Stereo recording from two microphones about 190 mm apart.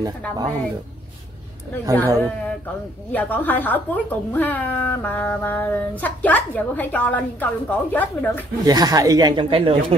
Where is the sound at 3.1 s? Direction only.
10° left (ahead or behind).